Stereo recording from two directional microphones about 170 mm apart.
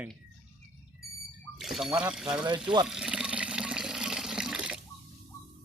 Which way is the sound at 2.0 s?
5° right (ahead or behind).